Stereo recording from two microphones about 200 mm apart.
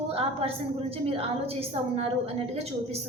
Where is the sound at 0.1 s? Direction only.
30° right (ahead or behind).